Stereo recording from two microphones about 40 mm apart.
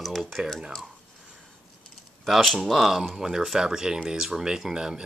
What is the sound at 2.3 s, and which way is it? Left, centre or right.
Speech, centre.